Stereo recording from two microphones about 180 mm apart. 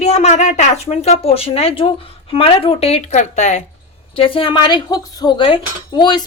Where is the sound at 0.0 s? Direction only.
35° left (ahead or behind).